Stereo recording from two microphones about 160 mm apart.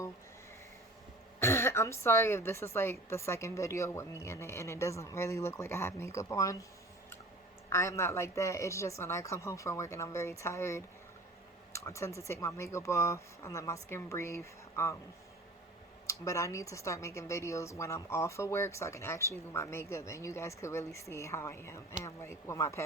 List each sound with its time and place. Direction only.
1.4 s speech: 15° left (ahead or behind)
7.7 s speech: 15° left (ahead or behind)
16.0 s speech: 20° left (ahead or behind)